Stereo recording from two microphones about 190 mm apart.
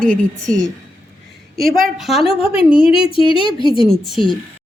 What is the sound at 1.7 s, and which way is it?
Speech, centre (ahead or behind).